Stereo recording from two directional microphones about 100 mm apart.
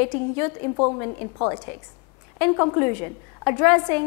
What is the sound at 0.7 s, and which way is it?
A woman's voice, 25° left (ahead or behind).